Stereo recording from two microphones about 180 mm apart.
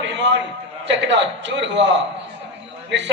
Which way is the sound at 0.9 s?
80° right.